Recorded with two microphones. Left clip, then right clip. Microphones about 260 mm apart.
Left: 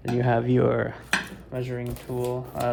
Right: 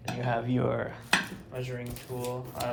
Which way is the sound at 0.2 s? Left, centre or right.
Left.